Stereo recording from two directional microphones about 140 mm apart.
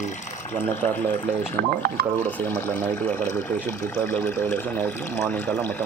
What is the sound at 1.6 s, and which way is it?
Speech, 90° right.